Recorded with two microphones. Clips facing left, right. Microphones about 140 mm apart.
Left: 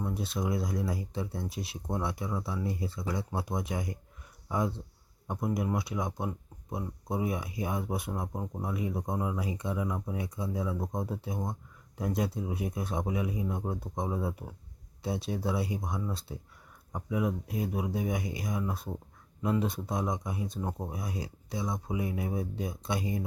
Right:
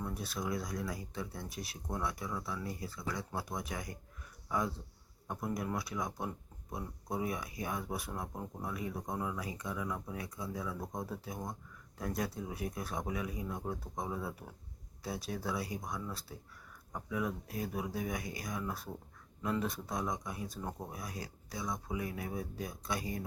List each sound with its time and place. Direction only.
0.0 s speech: 25° left (ahead or behind)